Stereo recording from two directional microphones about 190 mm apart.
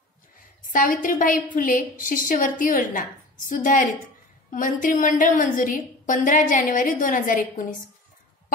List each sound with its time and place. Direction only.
0.7 s a woman's voice: 45° left (ahead or behind)